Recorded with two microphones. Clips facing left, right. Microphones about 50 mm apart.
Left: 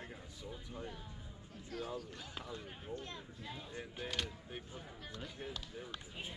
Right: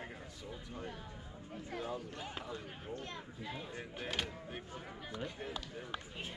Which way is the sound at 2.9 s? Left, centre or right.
Right.